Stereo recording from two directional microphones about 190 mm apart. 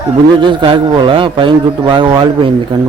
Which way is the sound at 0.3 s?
25° right (ahead or behind).